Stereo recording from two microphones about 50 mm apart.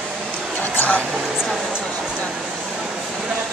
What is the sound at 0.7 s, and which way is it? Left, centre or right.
Music, left.